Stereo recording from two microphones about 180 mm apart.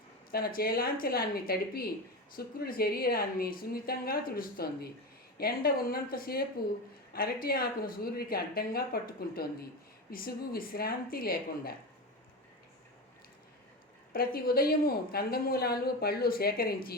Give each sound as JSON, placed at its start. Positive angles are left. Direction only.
{"t": 0.3, "sound": "a woman's voice", "side_deg": 55}
{"t": 7.4, "sound": "a woman's voice", "side_deg": 55}
{"t": 14.1, "sound": "a woman's voice", "side_deg": 55}